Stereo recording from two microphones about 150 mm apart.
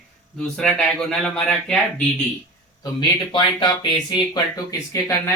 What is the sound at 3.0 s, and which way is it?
Speech, 30° left (ahead or behind).